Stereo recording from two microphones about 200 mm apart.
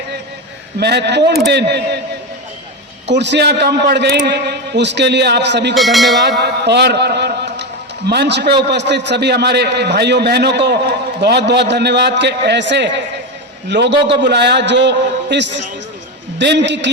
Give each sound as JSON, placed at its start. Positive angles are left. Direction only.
{"t": 0.8, "sound": "a man's voice", "side_deg": -55}
{"t": 3.1, "sound": "a man's voice", "side_deg": -60}
{"t": 5.7, "sound": "speech", "side_deg": 0}
{"t": 6.4, "sound": "a man's voice", "side_deg": -55}